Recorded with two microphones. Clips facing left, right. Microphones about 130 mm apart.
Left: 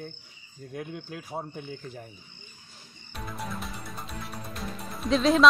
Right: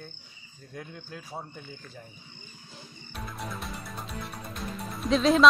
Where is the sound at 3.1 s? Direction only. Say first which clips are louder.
Left 2 dB; centre (ahead or behind).